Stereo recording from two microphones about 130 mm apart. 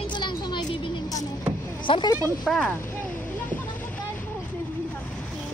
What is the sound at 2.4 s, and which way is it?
Speech, 5° left (ahead or behind).